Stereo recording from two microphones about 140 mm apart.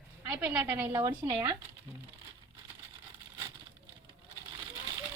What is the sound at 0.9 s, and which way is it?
Speech, 30° right (ahead or behind).